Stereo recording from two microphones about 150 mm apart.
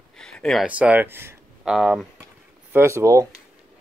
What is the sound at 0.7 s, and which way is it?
Speech, 10° right (ahead or behind).